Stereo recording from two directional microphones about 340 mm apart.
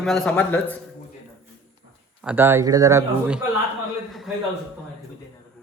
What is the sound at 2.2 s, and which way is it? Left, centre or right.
Speech, centre.